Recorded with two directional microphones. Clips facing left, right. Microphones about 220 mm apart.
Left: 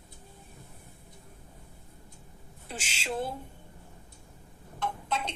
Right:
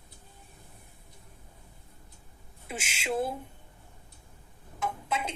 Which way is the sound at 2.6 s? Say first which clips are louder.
Right 2 dB; 5° right (ahead or behind).